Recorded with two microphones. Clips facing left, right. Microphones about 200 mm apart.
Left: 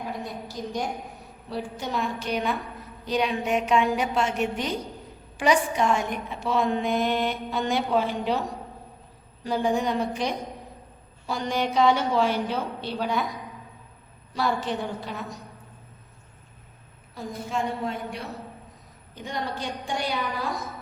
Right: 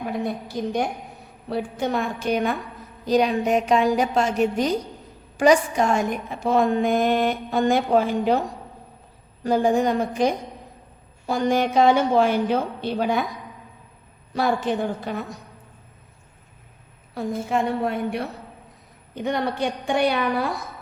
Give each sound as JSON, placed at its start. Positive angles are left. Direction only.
{"t": 0.3, "sound": "a woman's voice", "side_deg": -60}
{"t": 9.4, "sound": "a woman's voice", "side_deg": -45}
{"t": 14.3, "sound": "a woman's voice", "side_deg": -55}
{"t": 17.2, "sound": "a woman's voice", "side_deg": -60}